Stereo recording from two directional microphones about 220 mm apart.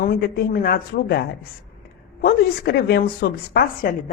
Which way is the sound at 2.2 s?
45° left (ahead or behind).